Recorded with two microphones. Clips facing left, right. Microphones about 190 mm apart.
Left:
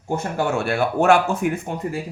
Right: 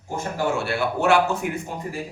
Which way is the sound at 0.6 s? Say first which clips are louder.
Left 4 dB; 50° left (ahead or behind).